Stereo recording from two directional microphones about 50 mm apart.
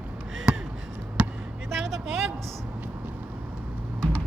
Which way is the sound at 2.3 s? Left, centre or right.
Centre.